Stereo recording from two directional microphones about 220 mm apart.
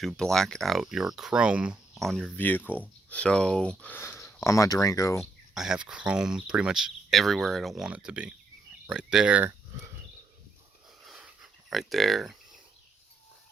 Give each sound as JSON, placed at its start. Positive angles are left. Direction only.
{"t": 0.0, "sound": "speech", "side_deg": 0}
{"t": 5.2, "sound": "speech", "side_deg": 0}
{"t": 11.0, "sound": "a sound", "side_deg": 0}